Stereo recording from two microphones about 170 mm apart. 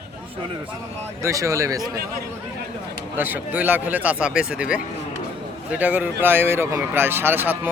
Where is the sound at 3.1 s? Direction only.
10° right (ahead or behind).